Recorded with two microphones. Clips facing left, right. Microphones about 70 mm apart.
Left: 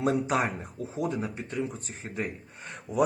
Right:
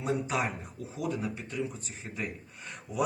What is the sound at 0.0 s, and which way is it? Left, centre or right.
Speech, left.